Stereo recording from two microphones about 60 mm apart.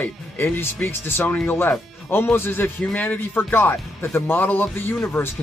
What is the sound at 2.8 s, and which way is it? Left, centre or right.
Speech, left.